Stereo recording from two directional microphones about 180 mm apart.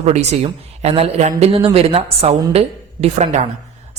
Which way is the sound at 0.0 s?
40° right (ahead or behind).